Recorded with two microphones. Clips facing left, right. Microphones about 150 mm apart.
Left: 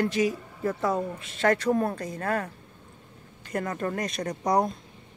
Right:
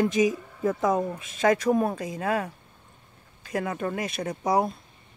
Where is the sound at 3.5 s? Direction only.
5° right (ahead or behind).